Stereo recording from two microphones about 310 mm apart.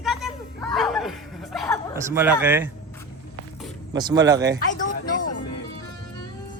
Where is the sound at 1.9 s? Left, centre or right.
Centre.